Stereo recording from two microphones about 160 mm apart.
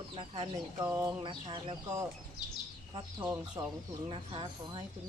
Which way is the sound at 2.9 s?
25° right (ahead or behind).